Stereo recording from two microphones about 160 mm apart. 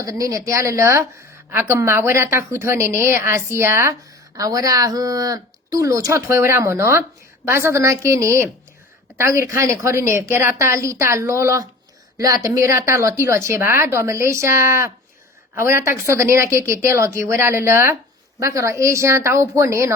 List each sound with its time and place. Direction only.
0.0 s a woman's voice: 20° right (ahead or behind)